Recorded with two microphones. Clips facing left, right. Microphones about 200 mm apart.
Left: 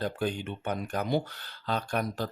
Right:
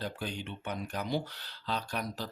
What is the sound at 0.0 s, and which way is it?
Speech, 50° left (ahead or behind).